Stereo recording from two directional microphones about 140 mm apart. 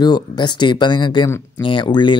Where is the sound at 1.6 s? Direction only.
35° left (ahead or behind).